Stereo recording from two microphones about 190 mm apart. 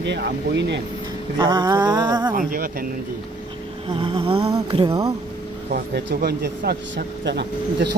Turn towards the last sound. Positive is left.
turn(degrees=-60)  # may be behind; listen again after turning